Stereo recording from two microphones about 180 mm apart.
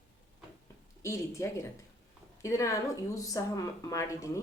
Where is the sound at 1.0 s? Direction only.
15° left (ahead or behind).